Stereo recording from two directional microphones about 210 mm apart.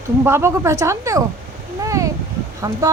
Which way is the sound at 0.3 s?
15° right (ahead or behind).